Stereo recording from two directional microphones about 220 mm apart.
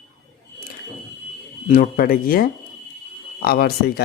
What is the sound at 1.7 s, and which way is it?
A man's voice, 40° left (ahead or behind).